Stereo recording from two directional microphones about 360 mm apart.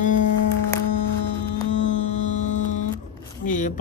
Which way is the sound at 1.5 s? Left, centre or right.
Centre.